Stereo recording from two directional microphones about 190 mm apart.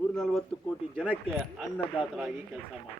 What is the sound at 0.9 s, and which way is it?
Speech, 10° right (ahead or behind).